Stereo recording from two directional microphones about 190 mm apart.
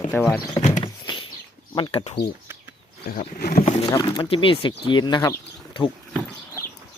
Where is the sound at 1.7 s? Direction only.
25° left (ahead or behind).